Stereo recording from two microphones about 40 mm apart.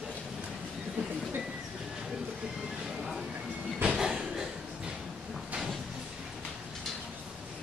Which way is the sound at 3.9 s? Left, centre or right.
Centre.